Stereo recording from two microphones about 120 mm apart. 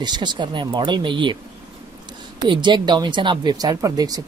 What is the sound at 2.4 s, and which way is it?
Speech, 40° right (ahead or behind).